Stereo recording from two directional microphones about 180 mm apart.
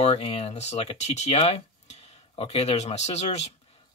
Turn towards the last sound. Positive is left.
turn(degrees=35)  # may be behind; listen again after turning